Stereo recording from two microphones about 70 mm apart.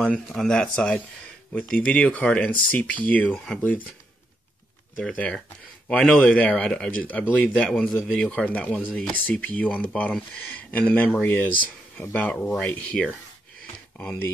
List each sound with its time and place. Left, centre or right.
0.0 s speech: centre
4.9 s speech: left
12.3 s speech: centre
13.9 s speech: left